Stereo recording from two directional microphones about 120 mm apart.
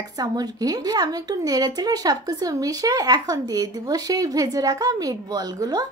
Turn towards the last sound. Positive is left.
turn(degrees=-30)  # may be behind; listen again after turning